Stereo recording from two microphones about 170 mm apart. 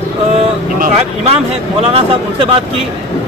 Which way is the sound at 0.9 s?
35° right (ahead or behind).